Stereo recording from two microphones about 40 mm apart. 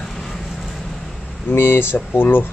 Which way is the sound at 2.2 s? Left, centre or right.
Left.